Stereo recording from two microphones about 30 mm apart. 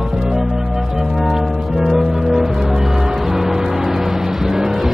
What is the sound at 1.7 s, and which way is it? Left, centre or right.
Music, centre.